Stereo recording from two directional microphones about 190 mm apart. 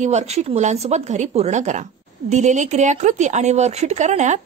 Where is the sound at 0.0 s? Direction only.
35° right (ahead or behind).